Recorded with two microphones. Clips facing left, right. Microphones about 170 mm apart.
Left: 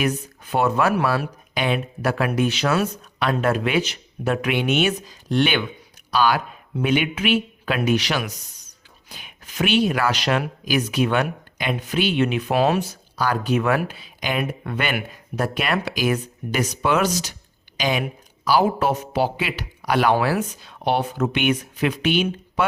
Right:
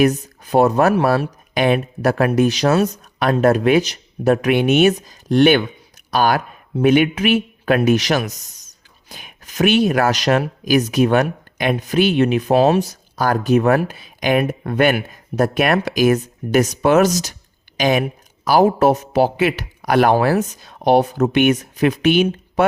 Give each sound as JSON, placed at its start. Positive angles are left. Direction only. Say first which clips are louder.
{"t": 0.0, "sound": "speech", "louder": "right 8 dB", "side_deg": -40}